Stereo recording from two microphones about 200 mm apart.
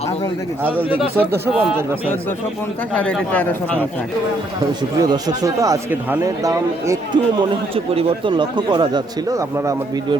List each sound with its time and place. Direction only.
0.6 s speech: 10° right (ahead or behind)
3.0 s speech: 5° left (ahead or behind)
4.9 s speech: 20° right (ahead or behind)
7.9 s speech: 25° right (ahead or behind)